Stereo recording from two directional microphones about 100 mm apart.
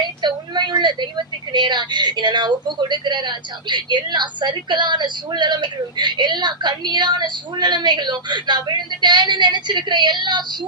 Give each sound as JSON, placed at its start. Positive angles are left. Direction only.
{"t": 0.2, "sound": "a woman's voice", "side_deg": -50}